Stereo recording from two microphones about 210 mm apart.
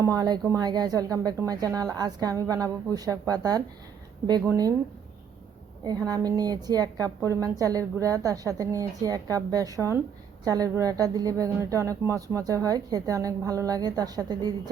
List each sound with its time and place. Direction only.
0.0 s speech: 15° right (ahead or behind)
6.1 s speech: 15° right (ahead or behind)